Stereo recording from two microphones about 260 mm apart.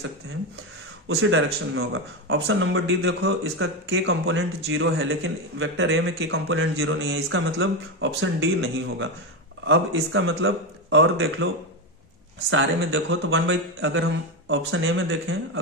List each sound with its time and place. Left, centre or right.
1.0 s a man's voice: right
12.4 s a man's voice: right